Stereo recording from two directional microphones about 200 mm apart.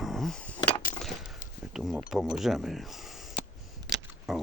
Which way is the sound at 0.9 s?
Centre (ahead or behind).